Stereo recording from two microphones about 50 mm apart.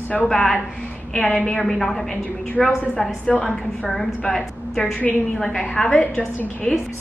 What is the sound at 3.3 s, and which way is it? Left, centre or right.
Speech, left.